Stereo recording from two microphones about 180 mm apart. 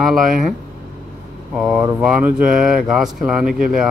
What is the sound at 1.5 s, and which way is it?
A man's voice, 5° right (ahead or behind).